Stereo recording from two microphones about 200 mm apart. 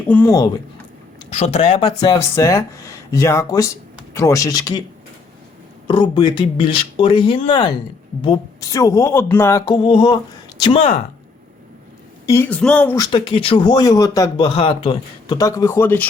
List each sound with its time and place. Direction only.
0.1 s a woman's voice: 10° left (ahead or behind)
1.3 s a man's voice: 30° left (ahead or behind)
2.0 s a woman's voice: 15° left (ahead or behind)
5.9 s a man's voice: 25° left (ahead or behind)
12.2 s a woman's voice: 10° left (ahead or behind)
13.0 s a man's voice: 25° left (ahead or behind)